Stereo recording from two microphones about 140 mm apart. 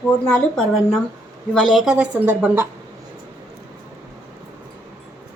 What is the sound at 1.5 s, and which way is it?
A woman's voice, centre (ahead or behind).